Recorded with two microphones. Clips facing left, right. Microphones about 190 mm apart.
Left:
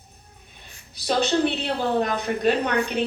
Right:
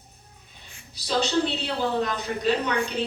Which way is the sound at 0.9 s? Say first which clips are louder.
Left 2 dB; 55° left (ahead or behind).